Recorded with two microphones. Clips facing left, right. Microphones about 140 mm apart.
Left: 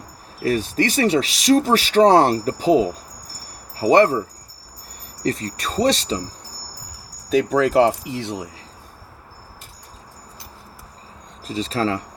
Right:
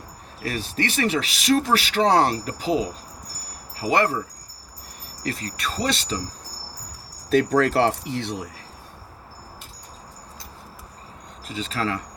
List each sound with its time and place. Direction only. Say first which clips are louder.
0.4 s speech: left 7 dB; 35° left (ahead or behind)
5.2 s speech: left 5 dB; 35° left (ahead or behind)
7.3 s speech: left 1 dB; 5° left (ahead or behind)
11.4 s speech: left 5 dB; 35° left (ahead or behind)